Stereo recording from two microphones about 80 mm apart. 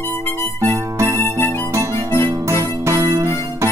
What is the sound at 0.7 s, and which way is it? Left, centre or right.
Music, right.